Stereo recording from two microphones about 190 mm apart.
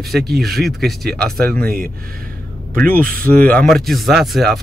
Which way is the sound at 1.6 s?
50° right (ahead or behind).